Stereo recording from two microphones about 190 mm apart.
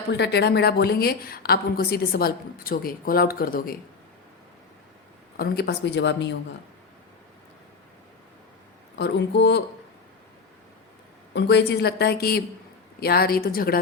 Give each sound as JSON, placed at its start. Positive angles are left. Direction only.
{"t": 0.1, "sound": "a woman's voice", "side_deg": 60}
{"t": 5.4, "sound": "speech", "side_deg": 55}
{"t": 9.0, "sound": "speech", "side_deg": 65}
{"t": 11.3, "sound": "a woman's voice", "side_deg": 60}